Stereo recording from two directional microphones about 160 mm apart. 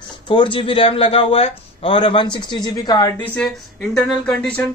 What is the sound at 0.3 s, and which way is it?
A man's voice, 30° left (ahead or behind).